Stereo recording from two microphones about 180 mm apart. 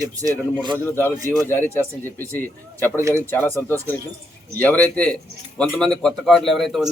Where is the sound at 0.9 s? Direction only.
10° left (ahead or behind).